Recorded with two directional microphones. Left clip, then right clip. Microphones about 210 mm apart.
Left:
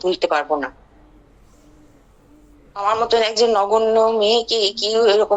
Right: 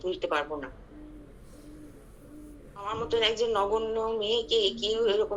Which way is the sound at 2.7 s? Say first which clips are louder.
Left 13 dB; 60° left (ahead or behind).